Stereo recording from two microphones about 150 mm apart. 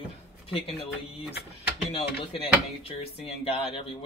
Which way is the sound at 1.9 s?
40° left (ahead or behind).